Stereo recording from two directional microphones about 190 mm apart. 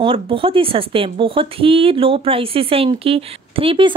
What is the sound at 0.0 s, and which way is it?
Speech, 25° right (ahead or behind).